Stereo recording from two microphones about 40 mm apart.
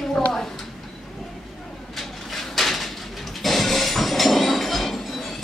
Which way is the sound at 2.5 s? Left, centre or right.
Centre.